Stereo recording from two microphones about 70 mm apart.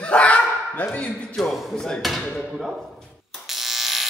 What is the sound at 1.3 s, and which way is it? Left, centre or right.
Speech, centre.